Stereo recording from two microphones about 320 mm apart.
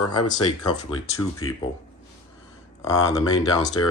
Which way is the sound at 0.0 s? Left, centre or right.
Left.